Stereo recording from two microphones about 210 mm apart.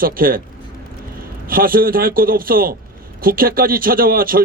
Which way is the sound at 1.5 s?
45° right (ahead or behind).